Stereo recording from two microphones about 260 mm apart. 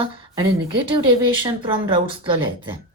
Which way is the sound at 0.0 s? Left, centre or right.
Centre.